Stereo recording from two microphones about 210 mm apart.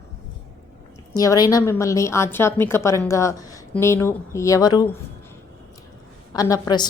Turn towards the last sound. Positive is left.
turn(degrees=20)  # may be behind; listen again after turning